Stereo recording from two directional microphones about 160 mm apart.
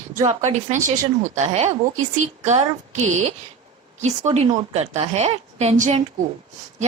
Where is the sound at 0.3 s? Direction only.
45° right (ahead or behind).